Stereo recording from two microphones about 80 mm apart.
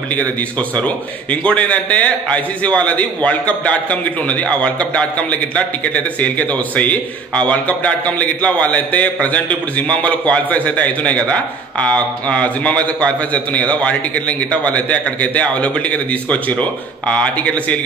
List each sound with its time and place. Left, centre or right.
0.1 s a man's voice: centre